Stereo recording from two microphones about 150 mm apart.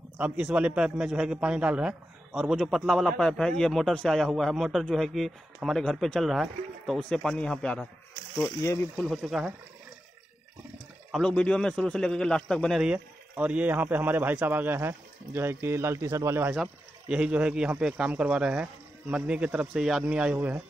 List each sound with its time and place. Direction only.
0.2 s a man's voice: 10° right (ahead or behind); by 7.9 s 10° left (ahead or behind)
8.5 s speech: 20° left (ahead or behind)
8.9 s a man's voice: 5° right (ahead or behind)
11.1 s a man's voice: 5° left (ahead or behind)
12.8 s speech: 10° right (ahead or behind)